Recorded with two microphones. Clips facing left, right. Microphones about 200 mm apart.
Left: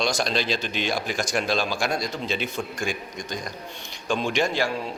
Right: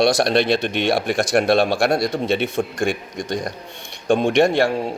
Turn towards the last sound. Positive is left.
turn(degrees=-70)  # may be behind; listen again after turning